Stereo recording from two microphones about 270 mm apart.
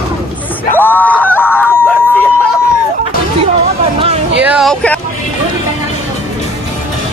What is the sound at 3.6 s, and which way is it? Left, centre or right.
Hubbub, right.